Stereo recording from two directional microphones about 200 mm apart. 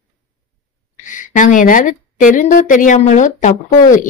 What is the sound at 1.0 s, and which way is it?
A woman's voice, 40° left (ahead or behind).